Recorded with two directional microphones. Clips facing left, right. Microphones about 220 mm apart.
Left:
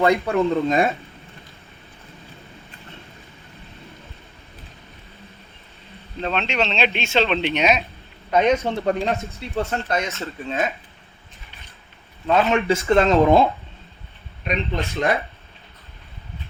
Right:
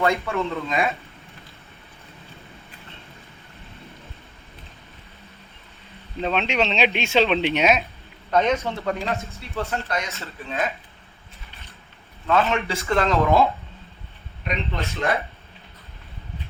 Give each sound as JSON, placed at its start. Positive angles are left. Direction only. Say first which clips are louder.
{"t": 0.3, "sound": "speech", "louder": "left 7 dB", "side_deg": 45}
{"t": 6.1, "sound": "speech", "louder": "right 1 dB", "side_deg": -5}
{"t": 8.5, "sound": "speech", "louder": "left 4 dB", "side_deg": 30}
{"t": 12.3, "sound": "speech", "louder": "left 4 dB", "side_deg": 25}
{"t": 14.4, "sound": "speech", "louder": "left 3 dB", "side_deg": 15}